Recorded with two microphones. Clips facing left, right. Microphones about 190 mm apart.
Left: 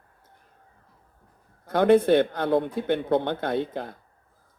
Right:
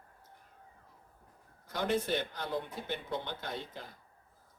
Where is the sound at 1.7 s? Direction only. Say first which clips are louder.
Left 14 dB; 60° left (ahead or behind).